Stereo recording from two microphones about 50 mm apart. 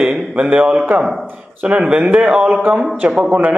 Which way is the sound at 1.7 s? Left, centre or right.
Right.